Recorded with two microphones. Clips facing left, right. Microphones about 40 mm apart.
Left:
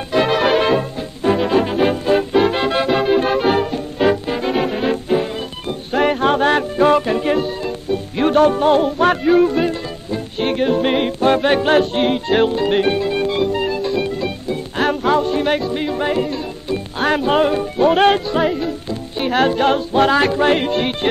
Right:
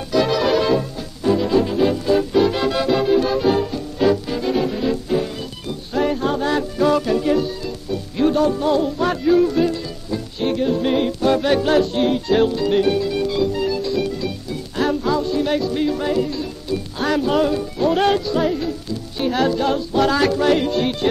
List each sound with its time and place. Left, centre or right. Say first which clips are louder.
0.1 s music: left 2 dB; left
15.7 s music: left 1 dB; left